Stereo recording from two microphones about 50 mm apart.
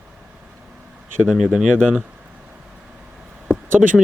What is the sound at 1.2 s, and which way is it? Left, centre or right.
Speech, centre.